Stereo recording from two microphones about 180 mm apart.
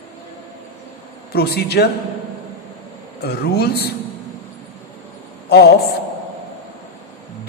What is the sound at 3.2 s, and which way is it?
Speech, 60° left (ahead or behind).